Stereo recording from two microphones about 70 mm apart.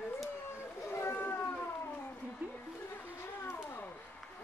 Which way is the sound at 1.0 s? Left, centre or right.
Left.